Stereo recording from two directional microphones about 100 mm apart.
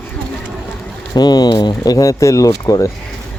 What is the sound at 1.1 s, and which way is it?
Speech, 45° left (ahead or behind).